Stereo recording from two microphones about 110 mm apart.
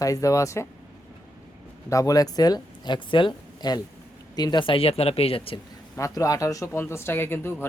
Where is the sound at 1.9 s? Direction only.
30° left (ahead or behind); by 5.5 s 60° left (ahead or behind).